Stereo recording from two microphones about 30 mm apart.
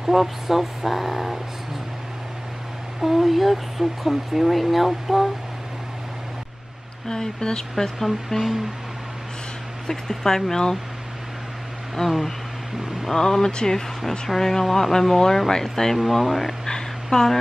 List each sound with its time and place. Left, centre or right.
0.0 s speech: centre
3.0 s speech: centre
7.1 s speech: left
7.7 s speech: centre
9.8 s speech: centre
12.0 s speech: centre
13.1 s speech: centre
16.6 s a sound: centre